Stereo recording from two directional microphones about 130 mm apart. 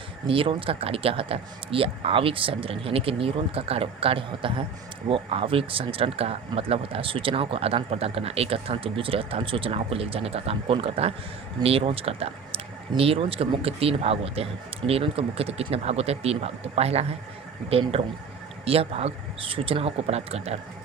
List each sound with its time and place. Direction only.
0.3 s speech: 45° right (ahead or behind)